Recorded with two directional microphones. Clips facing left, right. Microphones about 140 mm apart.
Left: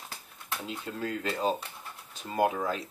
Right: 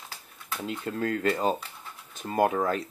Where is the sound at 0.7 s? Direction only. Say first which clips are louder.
Right 6 dB; 55° right (ahead or behind).